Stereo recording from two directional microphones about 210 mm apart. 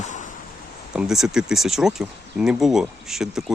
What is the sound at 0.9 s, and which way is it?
Speech, centre (ahead or behind).